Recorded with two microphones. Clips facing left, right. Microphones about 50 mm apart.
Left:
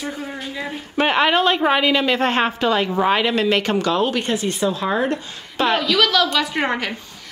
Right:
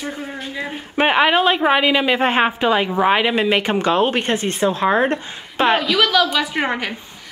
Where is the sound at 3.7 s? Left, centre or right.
Right.